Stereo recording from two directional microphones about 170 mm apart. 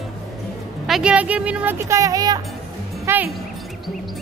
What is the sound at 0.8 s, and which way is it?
A woman's voice, 5° right (ahead or behind).